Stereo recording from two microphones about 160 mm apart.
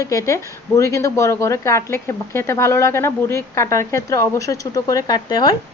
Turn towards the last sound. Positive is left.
turn(degrees=25)  # may be behind; listen again after turning